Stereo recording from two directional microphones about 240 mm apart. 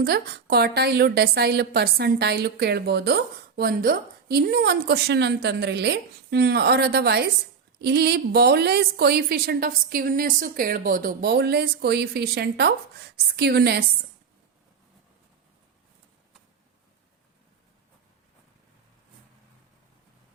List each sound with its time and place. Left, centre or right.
0.0 s a woman's voice: right